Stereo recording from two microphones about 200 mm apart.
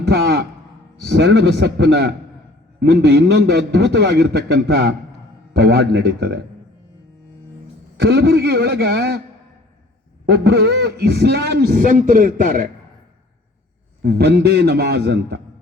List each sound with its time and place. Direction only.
0.0 s a sound: 55° right (ahead or behind)
1.0 s a man's voice: 55° right (ahead or behind)
7.9 s a man's voice: 55° right (ahead or behind)
10.2 s a man's voice: 55° right (ahead or behind)
14.0 s a man's voice: 55° right (ahead or behind)